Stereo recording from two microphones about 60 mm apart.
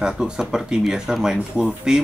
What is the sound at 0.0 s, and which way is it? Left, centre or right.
Speech, centre.